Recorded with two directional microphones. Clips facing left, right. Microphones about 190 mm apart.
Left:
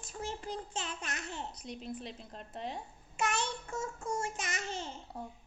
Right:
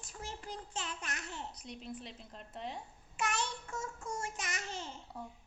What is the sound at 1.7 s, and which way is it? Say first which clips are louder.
A woman's voice: left 5 dB; 40° left (ahead or behind).